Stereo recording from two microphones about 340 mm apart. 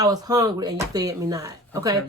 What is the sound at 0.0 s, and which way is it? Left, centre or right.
Speech, centre.